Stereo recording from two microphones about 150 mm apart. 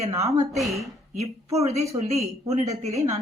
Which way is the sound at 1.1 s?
45° right (ahead or behind).